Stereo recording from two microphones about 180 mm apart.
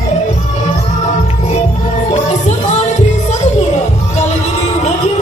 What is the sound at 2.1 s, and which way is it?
Music, 40° left (ahead or behind).